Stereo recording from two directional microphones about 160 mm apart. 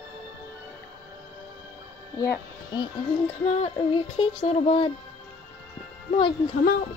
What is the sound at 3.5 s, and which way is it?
Child singing, 40° left (ahead or behind).